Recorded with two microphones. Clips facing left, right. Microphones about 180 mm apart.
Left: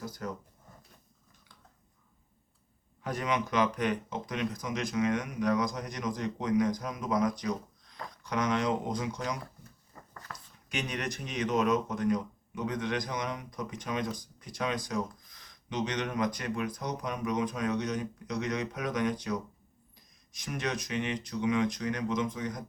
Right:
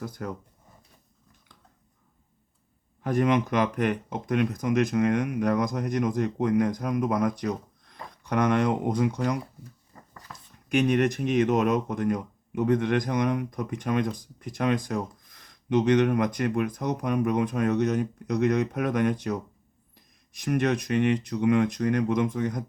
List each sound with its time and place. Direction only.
0.0 s speech: 55° right (ahead or behind)
3.0 s speech: 45° right (ahead or behind)
10.3 s a sound: centre (ahead or behind)
10.7 s speech: 55° right (ahead or behind)